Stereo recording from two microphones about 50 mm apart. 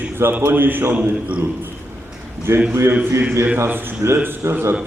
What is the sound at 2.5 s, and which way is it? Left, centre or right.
Speech, right.